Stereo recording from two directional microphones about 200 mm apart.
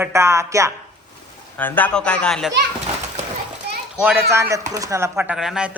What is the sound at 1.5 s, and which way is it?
Speech, 10° left (ahead or behind).